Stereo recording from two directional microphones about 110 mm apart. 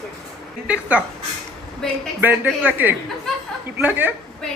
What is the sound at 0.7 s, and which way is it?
Speech, 10° right (ahead or behind).